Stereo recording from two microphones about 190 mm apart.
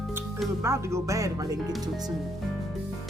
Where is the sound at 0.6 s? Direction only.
15° right (ahead or behind).